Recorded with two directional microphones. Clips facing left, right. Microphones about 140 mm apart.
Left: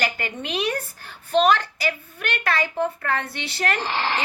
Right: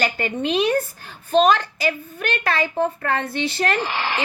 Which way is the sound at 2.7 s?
50° right (ahead or behind).